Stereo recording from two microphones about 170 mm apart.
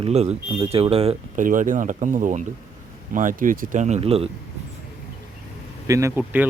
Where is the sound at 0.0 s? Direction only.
40° right (ahead or behind).